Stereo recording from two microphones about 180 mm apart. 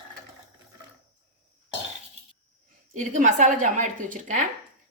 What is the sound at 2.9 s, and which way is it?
Speech, 45° right (ahead or behind).